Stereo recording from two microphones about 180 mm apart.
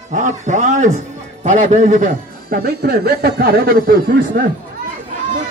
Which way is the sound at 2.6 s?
60° right (ahead or behind).